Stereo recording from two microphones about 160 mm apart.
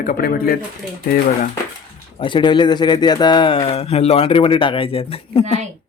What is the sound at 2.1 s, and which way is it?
Speech, 30° left (ahead or behind).